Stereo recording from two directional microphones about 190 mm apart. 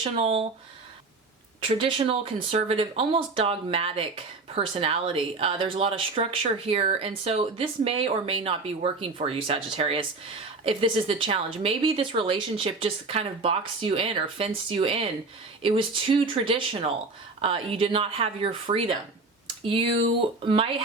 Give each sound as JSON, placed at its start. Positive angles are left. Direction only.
{"t": 0.0, "sound": "speech", "side_deg": -30}
{"t": 1.6, "sound": "speech", "side_deg": -30}